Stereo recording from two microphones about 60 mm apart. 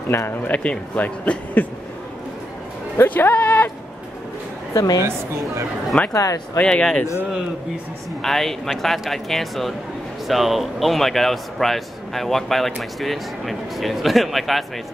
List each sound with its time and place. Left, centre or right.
0.1 s speech: left
0.5 s speech: left
1.6 s a sound: left
3.0 s speech: left
4.7 s a woman's voice: left
6.1 s speech: left
6.6 s speech: centre
8.2 s speech: centre